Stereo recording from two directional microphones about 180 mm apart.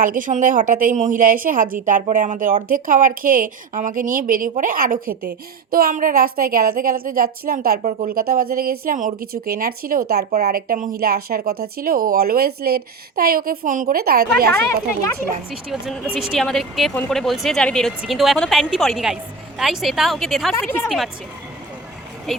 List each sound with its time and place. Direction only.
0.0 s a woman's voice: 50° right (ahead or behind)
15.7 s speech: centre (ahead or behind)
22.3 s speech: centre (ahead or behind)